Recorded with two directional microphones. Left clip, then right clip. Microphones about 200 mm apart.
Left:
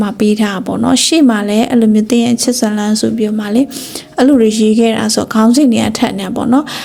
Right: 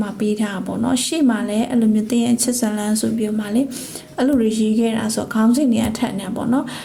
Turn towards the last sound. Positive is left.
turn(degrees=30)  # may be behind; listen again after turning